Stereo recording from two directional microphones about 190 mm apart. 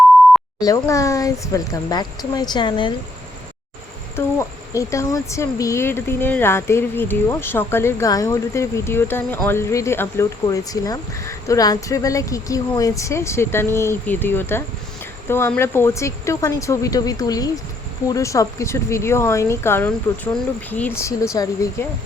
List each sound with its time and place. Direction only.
0.6 s speech: 15° left (ahead or behind)
4.1 s speech: 15° left (ahead or behind)